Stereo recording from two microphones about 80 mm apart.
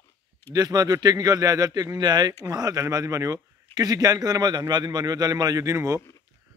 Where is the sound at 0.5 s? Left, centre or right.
Right.